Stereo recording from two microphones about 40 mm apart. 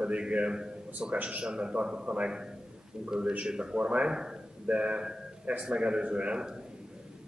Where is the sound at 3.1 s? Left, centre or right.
Right.